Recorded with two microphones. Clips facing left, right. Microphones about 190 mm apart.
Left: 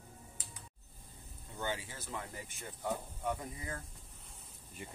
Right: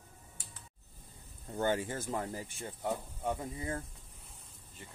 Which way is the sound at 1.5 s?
50° right (ahead or behind).